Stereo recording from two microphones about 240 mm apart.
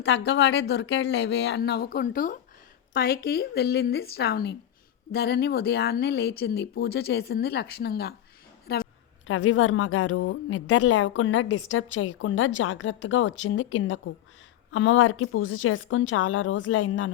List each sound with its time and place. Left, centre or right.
0.0 s a woman's voice: left